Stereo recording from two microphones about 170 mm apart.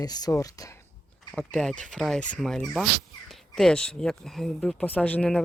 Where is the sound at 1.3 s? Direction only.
5° left (ahead or behind).